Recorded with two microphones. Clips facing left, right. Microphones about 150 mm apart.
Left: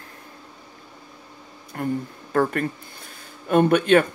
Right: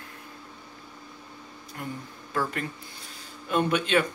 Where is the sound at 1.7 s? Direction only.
50° left (ahead or behind).